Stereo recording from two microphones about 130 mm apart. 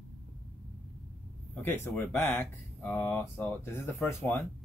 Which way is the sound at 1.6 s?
15° left (ahead or behind).